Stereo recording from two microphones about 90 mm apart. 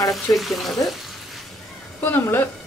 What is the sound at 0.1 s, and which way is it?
Speech, centre (ahead or behind).